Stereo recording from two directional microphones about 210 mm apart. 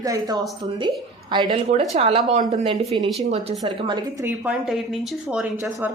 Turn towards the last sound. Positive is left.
turn(degrees=-10)  # may be behind; listen again after turning